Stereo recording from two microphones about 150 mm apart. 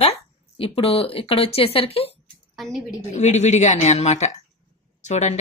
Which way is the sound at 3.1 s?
50° left (ahead or behind).